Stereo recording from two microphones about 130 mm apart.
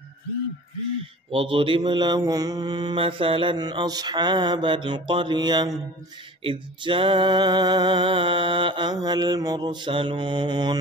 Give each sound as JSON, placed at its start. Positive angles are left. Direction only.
{"t": 1.3, "sound": "mantra", "side_deg": -45}